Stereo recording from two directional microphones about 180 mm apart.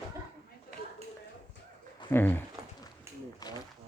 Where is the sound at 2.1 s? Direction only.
10° left (ahead or behind).